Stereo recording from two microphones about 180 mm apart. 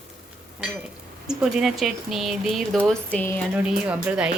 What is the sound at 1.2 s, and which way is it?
Speech, 5° right (ahead or behind).